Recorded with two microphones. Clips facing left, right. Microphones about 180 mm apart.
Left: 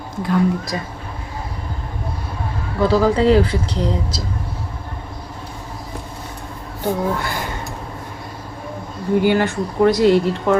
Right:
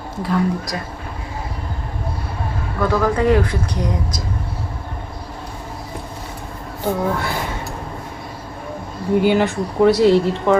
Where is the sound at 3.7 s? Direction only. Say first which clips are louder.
Left 1 dB; 30° left (ahead or behind).